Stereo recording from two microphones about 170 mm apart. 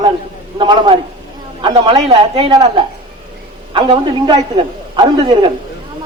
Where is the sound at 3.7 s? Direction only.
30° right (ahead or behind).